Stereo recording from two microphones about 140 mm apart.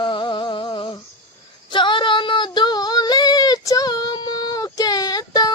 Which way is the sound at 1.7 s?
35° left (ahead or behind).